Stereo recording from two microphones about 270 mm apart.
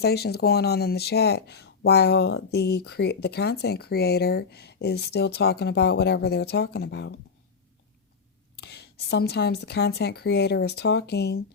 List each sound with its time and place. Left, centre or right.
0.0 s speech: left
8.5 s speech: left